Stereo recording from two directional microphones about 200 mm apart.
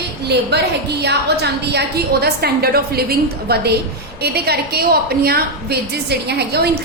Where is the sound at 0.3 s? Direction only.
55° right (ahead or behind).